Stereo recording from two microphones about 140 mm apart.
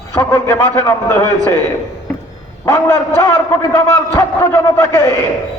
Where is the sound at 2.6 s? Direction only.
20° left (ahead or behind).